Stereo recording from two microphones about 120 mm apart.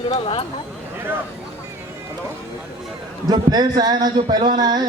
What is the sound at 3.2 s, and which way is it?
A man's voice, 35° right (ahead or behind).